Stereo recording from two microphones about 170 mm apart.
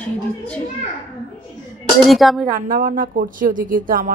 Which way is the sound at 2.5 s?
55° right (ahead or behind).